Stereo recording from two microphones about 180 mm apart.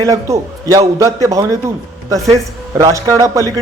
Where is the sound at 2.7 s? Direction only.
15° right (ahead or behind).